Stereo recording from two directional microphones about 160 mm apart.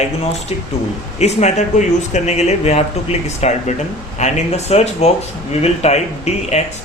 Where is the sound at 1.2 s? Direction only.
45° left (ahead or behind).